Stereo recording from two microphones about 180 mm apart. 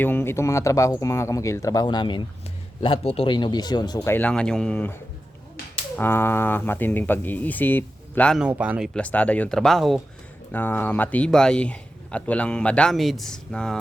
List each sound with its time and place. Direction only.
0.0 s a man's voice: 10° left (ahead or behind)
6.0 s a man's voice: 10° left (ahead or behind)
8.4 s speech: 5° right (ahead or behind)
9.0 s a man's voice: 10° left (ahead or behind)